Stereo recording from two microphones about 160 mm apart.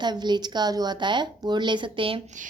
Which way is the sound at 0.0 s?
25° right (ahead or behind).